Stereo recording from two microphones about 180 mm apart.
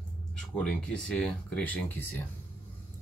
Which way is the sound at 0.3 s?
5° left (ahead or behind).